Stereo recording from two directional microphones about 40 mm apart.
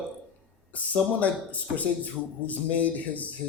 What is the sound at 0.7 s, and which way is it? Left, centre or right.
Speech, left.